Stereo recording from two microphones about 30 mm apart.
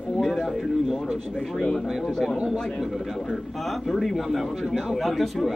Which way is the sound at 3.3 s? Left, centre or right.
Centre.